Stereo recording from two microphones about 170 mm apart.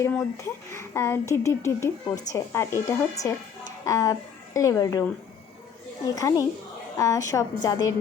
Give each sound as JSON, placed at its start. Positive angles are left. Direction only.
{"t": 0.0, "sound": "speech", "side_deg": 15}
{"t": 6.1, "sound": "a woman's voice", "side_deg": 20}